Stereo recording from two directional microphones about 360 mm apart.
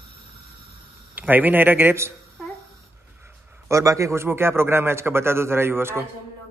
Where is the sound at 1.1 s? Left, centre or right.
Centre.